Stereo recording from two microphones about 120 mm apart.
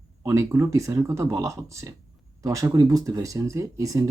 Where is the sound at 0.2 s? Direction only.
25° right (ahead or behind).